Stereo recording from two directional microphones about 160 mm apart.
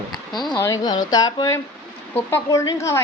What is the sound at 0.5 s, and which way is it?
Speech, 20° left (ahead or behind).